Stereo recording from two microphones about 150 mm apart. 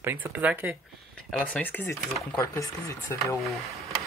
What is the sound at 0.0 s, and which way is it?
Speech, 15° right (ahead or behind).